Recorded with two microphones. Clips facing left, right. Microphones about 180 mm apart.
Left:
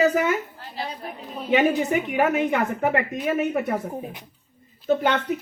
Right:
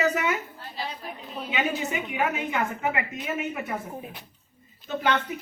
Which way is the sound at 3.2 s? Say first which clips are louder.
Left 9 dB; 55° left (ahead or behind).